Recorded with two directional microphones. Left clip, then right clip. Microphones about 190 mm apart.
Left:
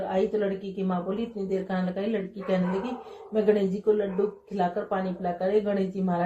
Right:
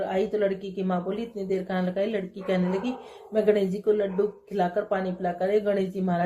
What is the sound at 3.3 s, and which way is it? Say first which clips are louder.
Speech: right 1 dB; 40° right (ahead or behind).